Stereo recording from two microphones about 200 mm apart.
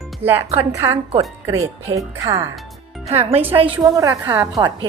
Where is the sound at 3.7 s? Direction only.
15° right (ahead or behind).